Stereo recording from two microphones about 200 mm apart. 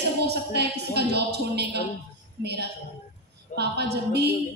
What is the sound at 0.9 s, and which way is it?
Speech, 55° right (ahead or behind).